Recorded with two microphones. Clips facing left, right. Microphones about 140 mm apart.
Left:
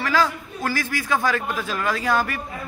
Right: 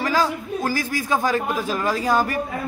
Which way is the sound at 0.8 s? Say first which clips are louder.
Right 1 dB; 15° right (ahead or behind).